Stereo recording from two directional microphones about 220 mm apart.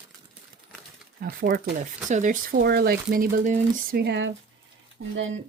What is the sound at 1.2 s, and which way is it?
Speech, 45° right (ahead or behind).